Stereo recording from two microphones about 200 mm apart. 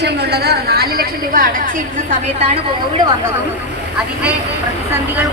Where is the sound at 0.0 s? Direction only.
55° right (ahead or behind).